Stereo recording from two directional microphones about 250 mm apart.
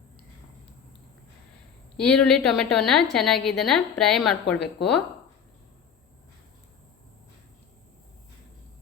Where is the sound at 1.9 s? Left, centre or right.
Centre.